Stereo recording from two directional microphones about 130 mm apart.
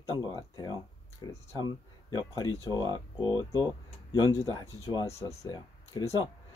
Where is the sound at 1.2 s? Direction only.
30° left (ahead or behind).